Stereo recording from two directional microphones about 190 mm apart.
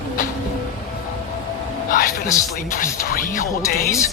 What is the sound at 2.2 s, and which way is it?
Speech, 15° left (ahead or behind).